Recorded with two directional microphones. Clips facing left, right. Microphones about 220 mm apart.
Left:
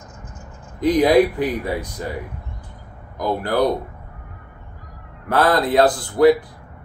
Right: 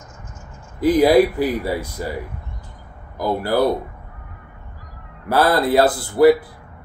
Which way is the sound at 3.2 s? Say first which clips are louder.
Right 1 dB; 5° right (ahead or behind).